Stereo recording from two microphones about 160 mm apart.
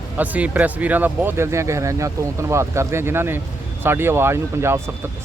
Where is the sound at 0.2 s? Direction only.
10° right (ahead or behind).